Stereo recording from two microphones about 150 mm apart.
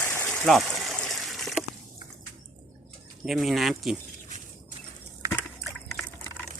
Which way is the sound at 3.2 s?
Centre (ahead or behind).